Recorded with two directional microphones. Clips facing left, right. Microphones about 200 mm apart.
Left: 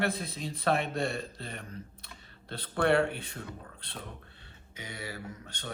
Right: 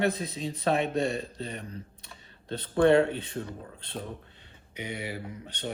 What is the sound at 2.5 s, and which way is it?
Speech, 25° right (ahead or behind).